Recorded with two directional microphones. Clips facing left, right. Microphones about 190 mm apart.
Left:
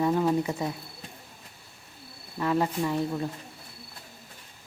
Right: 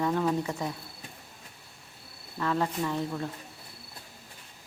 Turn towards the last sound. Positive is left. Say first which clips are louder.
# left 3 dB
turn(degrees=10)  # may be behind; listen again after turning